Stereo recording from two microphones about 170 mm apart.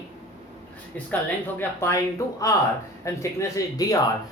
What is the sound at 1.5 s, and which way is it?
Speech, 15° left (ahead or behind).